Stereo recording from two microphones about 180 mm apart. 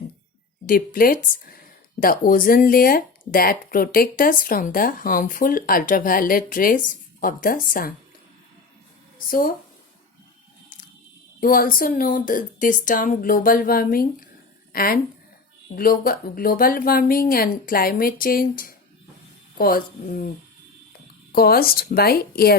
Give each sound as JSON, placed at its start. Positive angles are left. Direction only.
{"t": 0.7, "sound": "speech", "side_deg": 50}
{"t": 9.1, "sound": "speech", "side_deg": 50}
{"t": 11.3, "sound": "speech", "side_deg": 50}
{"t": 21.3, "sound": "speech", "side_deg": 55}